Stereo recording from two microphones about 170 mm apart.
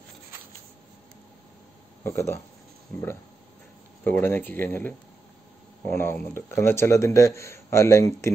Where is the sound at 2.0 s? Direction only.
15° left (ahead or behind).